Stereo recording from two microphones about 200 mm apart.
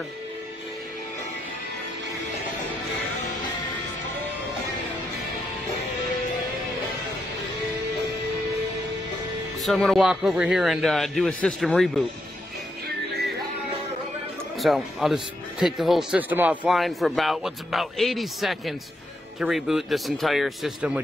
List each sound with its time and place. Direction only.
9.6 s speech: centre (ahead or behind)
14.6 s speech: centre (ahead or behind)